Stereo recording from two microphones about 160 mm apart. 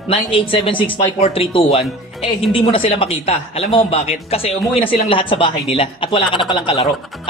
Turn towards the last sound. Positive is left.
turn(degrees=30)  # may be behind; listen again after turning